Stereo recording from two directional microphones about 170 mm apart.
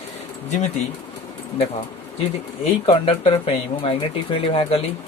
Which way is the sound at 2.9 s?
35° left (ahead or behind).